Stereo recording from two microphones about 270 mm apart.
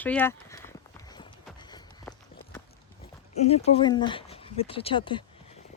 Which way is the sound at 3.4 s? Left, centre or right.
Left.